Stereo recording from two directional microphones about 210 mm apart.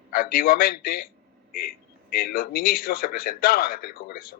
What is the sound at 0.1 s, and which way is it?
A man's voice, 45° left (ahead or behind).